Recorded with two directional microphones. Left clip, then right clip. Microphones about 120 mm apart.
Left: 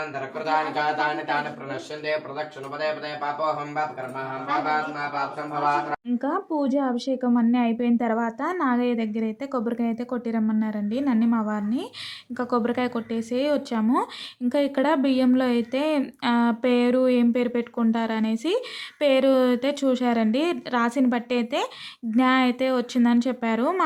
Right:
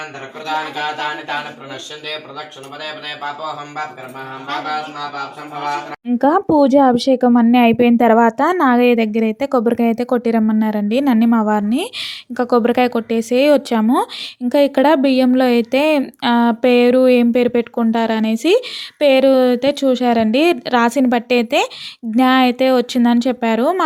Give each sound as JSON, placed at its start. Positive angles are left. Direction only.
{"t": 6.1, "sound": "speech", "side_deg": -75}
{"t": 13.8, "sound": "speech", "side_deg": -50}
{"t": 18.9, "sound": "speech", "side_deg": -40}